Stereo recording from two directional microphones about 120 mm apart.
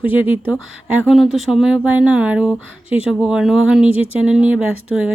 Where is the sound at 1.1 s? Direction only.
Centre (ahead or behind).